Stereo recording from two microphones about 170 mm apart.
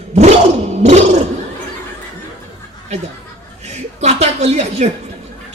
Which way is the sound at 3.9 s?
40° right (ahead or behind).